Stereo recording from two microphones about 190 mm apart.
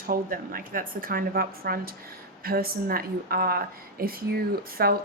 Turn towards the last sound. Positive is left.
turn(degrees=-55)  # may be behind; listen again after turning